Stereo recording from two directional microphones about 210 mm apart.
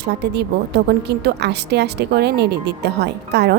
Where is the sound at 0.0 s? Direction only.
50° right (ahead or behind).